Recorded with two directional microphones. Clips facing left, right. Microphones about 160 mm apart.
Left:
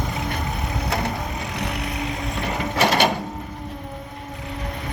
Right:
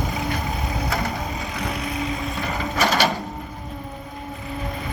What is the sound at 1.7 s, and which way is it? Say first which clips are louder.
Vehicle: right 1 dB; 70° left (ahead or behind).